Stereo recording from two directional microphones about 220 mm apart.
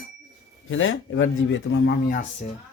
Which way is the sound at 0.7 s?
60° left (ahead or behind).